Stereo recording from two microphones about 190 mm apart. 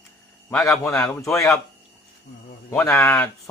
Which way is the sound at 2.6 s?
15° left (ahead or behind).